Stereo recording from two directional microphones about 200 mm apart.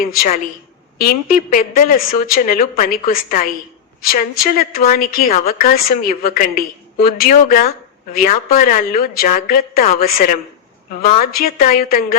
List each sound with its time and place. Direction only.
0.0 s a woman's voice: 45° left (ahead or behind)